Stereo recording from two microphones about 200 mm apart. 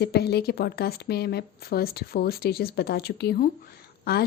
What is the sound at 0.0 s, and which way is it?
A woman's voice, 55° left (ahead or behind).